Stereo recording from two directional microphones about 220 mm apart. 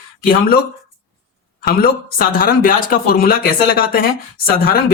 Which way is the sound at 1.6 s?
40° left (ahead or behind).